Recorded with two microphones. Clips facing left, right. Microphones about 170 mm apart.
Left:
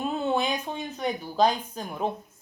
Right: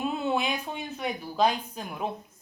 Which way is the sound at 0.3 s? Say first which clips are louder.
Left 2 dB; 35° left (ahead or behind).